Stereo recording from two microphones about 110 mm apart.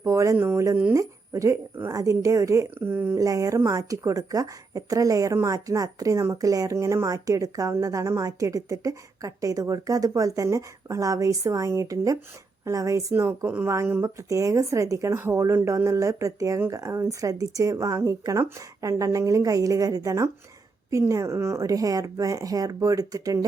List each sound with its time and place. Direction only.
0.0 s speech: 30° right (ahead or behind)
3.2 s a woman's voice: 30° right (ahead or behind)